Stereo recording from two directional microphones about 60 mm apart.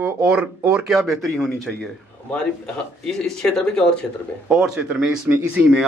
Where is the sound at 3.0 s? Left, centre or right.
Centre.